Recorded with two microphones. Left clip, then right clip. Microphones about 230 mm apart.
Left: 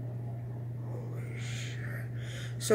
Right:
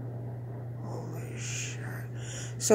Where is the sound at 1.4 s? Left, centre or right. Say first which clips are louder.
Right 5 dB; centre.